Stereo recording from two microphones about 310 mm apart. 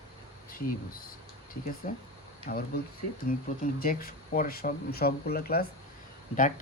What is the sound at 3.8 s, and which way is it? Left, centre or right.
Speech, left.